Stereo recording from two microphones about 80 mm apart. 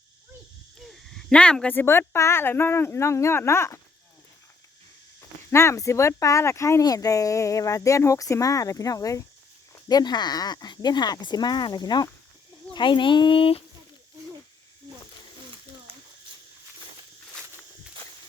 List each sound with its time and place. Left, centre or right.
0.8 s a sound: centre
1.7 s speech: left
5.5 s speech: left
6.8 s speech: left
9.9 s speech: left
12.7 s speech: left